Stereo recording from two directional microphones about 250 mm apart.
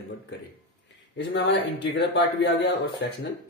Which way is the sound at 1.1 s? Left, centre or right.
Left.